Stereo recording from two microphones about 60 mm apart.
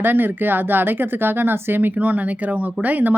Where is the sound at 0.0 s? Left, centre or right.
Right.